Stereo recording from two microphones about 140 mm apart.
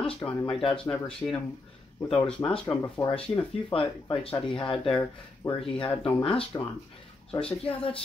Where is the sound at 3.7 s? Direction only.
40° left (ahead or behind).